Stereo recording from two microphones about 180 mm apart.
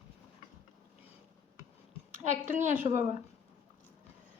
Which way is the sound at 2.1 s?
45° right (ahead or behind).